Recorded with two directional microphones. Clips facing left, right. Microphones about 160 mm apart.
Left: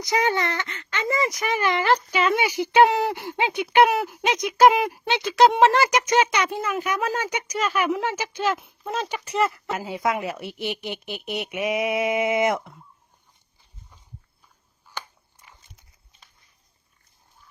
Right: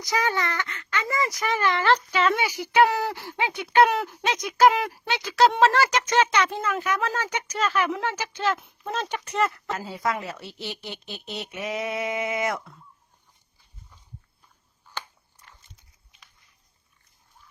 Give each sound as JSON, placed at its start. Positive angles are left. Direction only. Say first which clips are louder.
{"t": 0.0, "sound": "speech", "louder": "left 3 dB", "side_deg": 20}
{"t": 9.7, "sound": "speech", "louder": "left 3 dB", "side_deg": 15}
{"t": 14.9, "sound": "a sound", "louder": "left 1 dB", "side_deg": 15}